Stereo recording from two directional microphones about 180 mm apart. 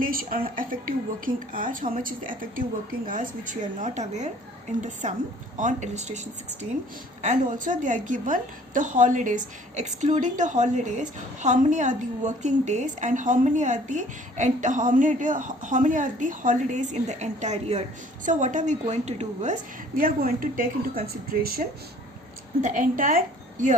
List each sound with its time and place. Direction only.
0.0 s a woman's voice: 50° right (ahead or behind)
20.0 s a woman's voice: 50° right (ahead or behind)